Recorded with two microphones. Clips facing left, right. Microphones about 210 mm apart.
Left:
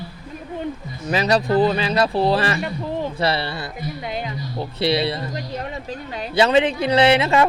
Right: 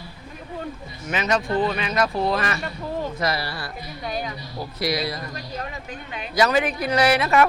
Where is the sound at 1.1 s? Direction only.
35° left (ahead or behind).